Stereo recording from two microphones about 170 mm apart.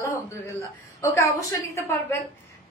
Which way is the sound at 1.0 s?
15° left (ahead or behind).